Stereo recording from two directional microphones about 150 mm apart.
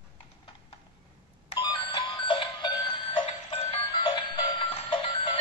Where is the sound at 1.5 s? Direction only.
30° left (ahead or behind).